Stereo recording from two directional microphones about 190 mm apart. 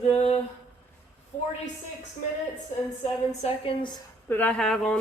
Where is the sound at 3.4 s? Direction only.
30° left (ahead or behind).